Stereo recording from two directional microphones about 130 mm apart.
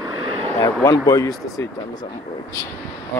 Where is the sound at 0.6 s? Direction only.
25° left (ahead or behind).